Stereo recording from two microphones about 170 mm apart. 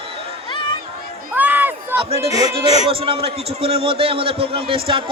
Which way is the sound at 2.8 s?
35° right (ahead or behind).